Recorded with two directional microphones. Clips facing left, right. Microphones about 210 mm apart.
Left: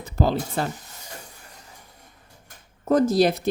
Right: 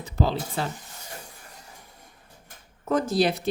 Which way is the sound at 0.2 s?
45° left (ahead or behind).